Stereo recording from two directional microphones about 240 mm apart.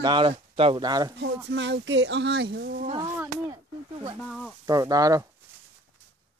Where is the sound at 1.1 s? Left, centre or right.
Right.